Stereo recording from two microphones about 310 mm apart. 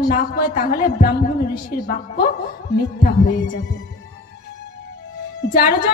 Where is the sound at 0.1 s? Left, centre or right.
Left.